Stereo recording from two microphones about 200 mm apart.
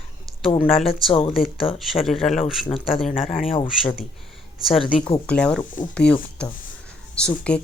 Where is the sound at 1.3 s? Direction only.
Centre (ahead or behind).